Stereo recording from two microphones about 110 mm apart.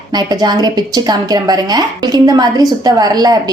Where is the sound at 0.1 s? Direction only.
40° right (ahead or behind).